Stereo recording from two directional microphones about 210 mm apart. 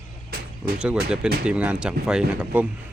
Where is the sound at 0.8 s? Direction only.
5° right (ahead or behind).